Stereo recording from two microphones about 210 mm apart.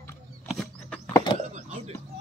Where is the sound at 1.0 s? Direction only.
15° left (ahead or behind).